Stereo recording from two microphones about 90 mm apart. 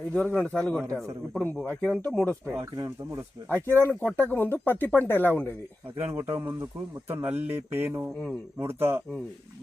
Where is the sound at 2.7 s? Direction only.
35° right (ahead or behind).